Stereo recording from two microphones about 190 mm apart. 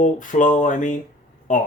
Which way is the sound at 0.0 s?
40° left (ahead or behind).